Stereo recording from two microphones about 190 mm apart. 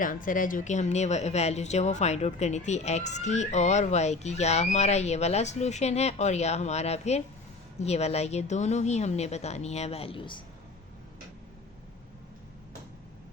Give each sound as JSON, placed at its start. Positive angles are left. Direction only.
{"t": 0.0, "sound": "speech", "side_deg": 45}